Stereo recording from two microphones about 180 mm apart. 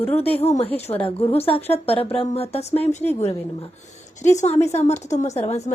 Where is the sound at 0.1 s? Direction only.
35° left (ahead or behind).